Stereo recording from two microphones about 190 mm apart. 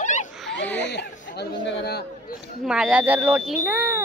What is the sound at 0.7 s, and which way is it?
Speech, 65° left (ahead or behind).